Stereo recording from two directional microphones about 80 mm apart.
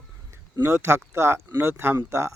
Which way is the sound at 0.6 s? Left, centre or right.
Right.